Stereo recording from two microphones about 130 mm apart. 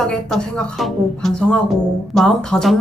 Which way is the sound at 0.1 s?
5° left (ahead or behind).